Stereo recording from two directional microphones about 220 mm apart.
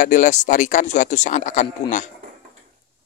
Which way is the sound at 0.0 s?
35° left (ahead or behind).